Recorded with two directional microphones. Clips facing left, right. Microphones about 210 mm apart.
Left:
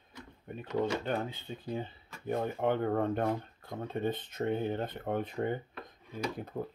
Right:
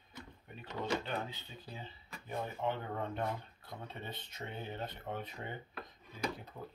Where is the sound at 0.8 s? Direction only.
50° left (ahead or behind).